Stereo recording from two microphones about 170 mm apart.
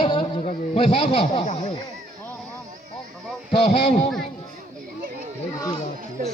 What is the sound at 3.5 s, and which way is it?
Speech, 40° left (ahead or behind).